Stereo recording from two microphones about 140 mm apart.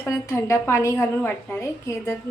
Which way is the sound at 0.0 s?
20° left (ahead or behind).